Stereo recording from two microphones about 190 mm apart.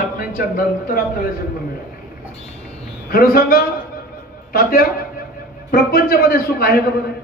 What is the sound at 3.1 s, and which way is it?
A man's voice, 50° left (ahead or behind).